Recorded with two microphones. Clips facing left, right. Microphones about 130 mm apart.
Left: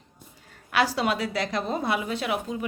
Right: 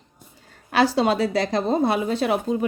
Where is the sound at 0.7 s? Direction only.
30° right (ahead or behind).